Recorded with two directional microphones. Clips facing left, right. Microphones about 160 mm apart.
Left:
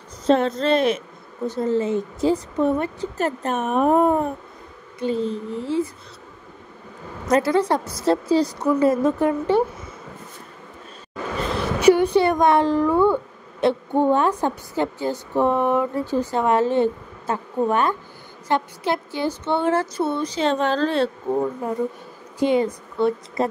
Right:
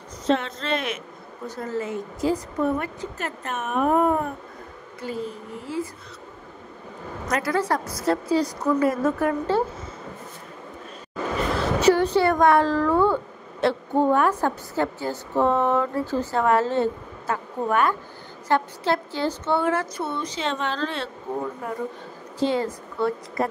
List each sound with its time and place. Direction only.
0.3 s a woman's voice: 40° left (ahead or behind)
7.2 s a woman's voice: 25° left (ahead or behind)
11.5 s a woman's voice: 15° left (ahead or behind)
19.5 s speech: 25° left (ahead or behind)
21.3 s a woman's voice: 20° left (ahead or behind)